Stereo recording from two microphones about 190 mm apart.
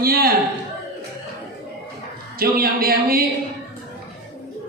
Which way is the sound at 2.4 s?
50° right (ahead or behind).